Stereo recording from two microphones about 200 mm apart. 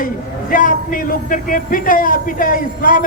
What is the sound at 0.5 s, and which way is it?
A man's voice, 45° left (ahead or behind).